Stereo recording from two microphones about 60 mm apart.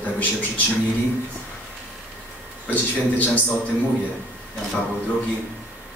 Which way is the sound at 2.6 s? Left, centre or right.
Left.